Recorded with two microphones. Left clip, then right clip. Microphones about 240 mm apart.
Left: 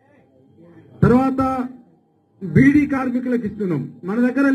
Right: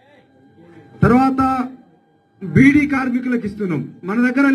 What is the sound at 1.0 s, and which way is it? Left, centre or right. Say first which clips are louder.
A man's voice: right 2 dB; right.